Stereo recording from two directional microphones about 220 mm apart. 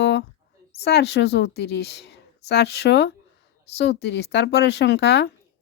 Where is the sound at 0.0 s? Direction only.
50° left (ahead or behind).